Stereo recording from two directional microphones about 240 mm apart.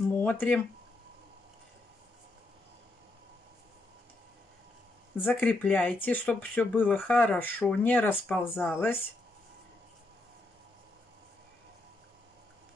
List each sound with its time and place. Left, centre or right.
0.2 s speech: centre
5.1 s speech: centre